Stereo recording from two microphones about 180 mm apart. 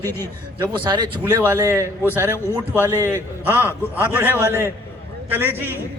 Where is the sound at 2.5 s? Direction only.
15° left (ahead or behind).